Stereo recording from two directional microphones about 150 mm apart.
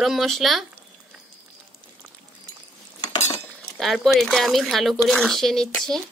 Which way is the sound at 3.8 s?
Centre (ahead or behind).